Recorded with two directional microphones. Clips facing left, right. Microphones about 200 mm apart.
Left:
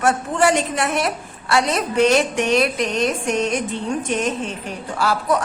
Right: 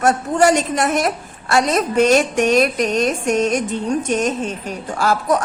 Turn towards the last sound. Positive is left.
turn(degrees=-45)  # may be behind; listen again after turning